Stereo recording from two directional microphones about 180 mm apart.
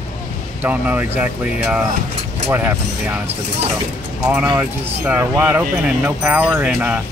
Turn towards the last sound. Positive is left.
turn(degrees=-10)  # may be behind; listen again after turning